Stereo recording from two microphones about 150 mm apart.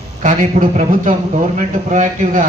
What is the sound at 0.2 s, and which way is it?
A man's voice, 55° right (ahead or behind).